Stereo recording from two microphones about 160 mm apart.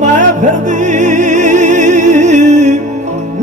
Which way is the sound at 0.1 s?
50° right (ahead or behind).